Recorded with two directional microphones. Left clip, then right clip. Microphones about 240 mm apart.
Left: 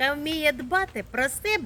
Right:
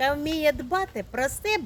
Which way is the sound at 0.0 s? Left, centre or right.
Centre.